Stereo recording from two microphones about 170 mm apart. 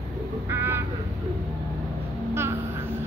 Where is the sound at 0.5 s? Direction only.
15° right (ahead or behind).